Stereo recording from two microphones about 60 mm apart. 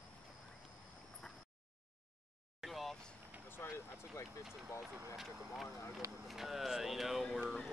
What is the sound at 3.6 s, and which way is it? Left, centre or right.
Vehicle, left.